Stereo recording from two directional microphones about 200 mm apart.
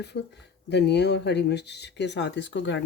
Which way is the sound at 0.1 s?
55° left (ahead or behind).